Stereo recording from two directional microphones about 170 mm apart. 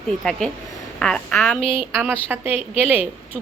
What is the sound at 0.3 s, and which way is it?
Speech, centre (ahead or behind).